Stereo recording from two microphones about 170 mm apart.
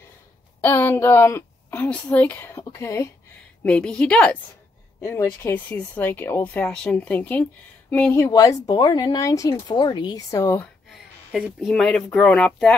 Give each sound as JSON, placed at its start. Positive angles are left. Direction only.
{"t": 0.6, "sound": "a woman's voice", "side_deg": 10}
{"t": 3.6, "sound": "speech", "side_deg": 5}
{"t": 11.3, "sound": "speech", "side_deg": -5}